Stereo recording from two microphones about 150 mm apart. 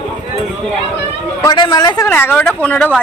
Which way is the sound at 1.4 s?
30° left (ahead or behind).